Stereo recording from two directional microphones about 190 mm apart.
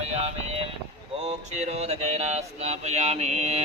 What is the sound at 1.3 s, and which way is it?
Mantra, 35° right (ahead or behind).